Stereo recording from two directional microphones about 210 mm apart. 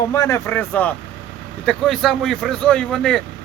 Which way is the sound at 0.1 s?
15° left (ahead or behind).